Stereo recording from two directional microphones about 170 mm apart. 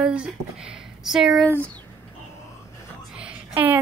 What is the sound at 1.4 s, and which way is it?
Speech, 10° left (ahead or behind).